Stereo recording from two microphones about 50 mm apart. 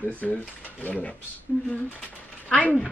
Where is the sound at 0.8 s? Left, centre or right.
Left.